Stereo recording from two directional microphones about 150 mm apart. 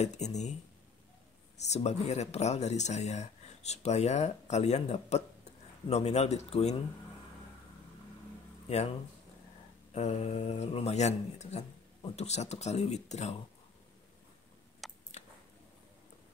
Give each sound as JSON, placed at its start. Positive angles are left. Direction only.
{"t": 0.0, "sound": "speech", "side_deg": 50}
{"t": 1.6, "sound": "speech", "side_deg": 50}
{"t": 8.6, "sound": "speech", "side_deg": 45}
{"t": 9.9, "sound": "speech", "side_deg": 45}
{"t": 14.8, "sound": "a sound", "side_deg": 0}